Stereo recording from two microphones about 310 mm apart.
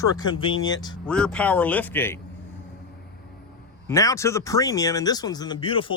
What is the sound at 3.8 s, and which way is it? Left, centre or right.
Speech, centre.